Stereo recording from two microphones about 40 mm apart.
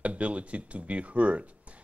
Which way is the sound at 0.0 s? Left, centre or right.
Right.